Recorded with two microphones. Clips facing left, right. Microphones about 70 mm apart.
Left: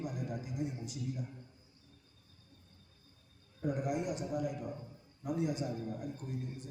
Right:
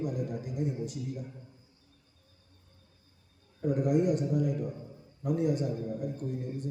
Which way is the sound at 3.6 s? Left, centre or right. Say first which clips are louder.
Right 8 dB; right.